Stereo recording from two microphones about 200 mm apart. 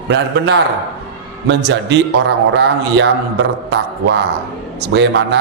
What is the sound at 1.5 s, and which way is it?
A man's voice, 60° right (ahead or behind).